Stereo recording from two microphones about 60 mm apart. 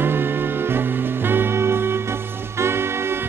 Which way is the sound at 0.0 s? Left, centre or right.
Right.